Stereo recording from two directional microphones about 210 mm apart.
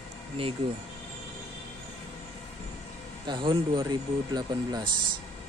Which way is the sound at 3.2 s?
25° right (ahead or behind).